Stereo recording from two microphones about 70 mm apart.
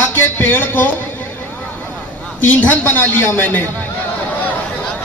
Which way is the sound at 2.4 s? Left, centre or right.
Left.